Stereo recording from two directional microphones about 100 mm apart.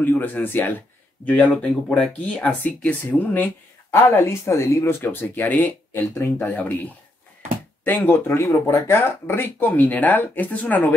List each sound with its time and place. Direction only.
0.0 s speech: 20° left (ahead or behind)
3.9 s speech: 25° left (ahead or behind)
6.1 s speech: 30° left (ahead or behind)
6.4 s speech: 15° left (ahead or behind)